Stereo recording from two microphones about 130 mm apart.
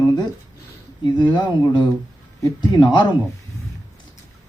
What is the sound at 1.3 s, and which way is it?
Speech, 35° left (ahead or behind).